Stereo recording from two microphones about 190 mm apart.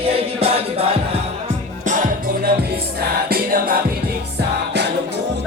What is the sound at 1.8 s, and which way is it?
Music, 45° right (ahead or behind).